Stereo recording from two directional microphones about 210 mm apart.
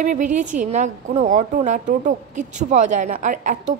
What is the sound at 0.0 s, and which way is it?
A woman's voice, 35° right (ahead or behind).